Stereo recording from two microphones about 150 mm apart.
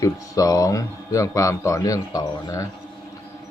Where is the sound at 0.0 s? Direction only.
25° left (ahead or behind).